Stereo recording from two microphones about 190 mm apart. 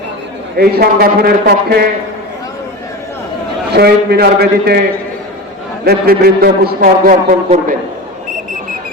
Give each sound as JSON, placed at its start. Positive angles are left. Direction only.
{"t": 0.5, "sound": "a man's voice", "side_deg": -55}
{"t": 3.7, "sound": "a man's voice", "side_deg": -60}
{"t": 5.8, "sound": "a man's voice", "side_deg": -55}